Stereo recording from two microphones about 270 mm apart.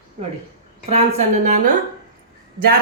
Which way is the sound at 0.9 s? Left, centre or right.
Right.